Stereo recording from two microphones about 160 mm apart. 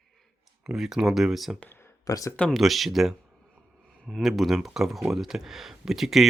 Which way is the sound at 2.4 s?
Centre (ahead or behind).